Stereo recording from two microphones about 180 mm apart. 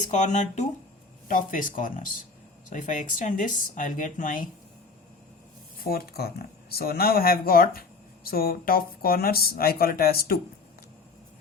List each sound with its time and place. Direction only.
0.0 s speech: 40° left (ahead or behind)
5.8 s speech: 55° left (ahead or behind)